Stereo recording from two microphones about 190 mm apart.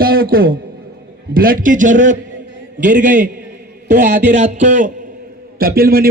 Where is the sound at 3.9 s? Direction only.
40° right (ahead or behind).